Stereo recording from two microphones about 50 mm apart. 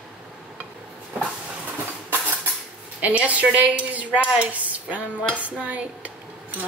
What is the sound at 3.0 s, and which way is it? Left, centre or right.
A woman's voice, right.